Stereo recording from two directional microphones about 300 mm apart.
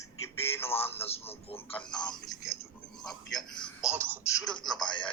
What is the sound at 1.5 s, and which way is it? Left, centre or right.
Speech, centre.